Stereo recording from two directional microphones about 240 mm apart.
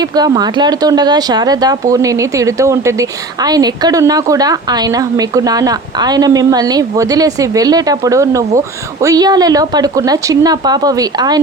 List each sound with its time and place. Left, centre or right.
0.0 s speech: centre